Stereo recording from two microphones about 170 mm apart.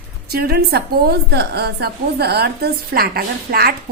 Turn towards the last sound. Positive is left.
turn(degrees=-65)  # may be behind; listen again after turning